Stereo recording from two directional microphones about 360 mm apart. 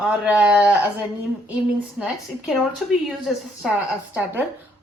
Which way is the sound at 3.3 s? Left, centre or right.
Centre.